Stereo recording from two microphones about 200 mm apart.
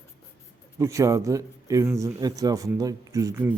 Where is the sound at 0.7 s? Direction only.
15° right (ahead or behind).